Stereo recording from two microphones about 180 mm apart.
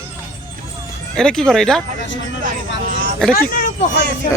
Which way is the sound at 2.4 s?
50° right (ahead or behind).